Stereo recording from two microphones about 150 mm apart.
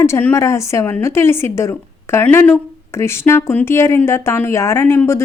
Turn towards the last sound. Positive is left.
turn(degrees=15)  # may be behind; listen again after turning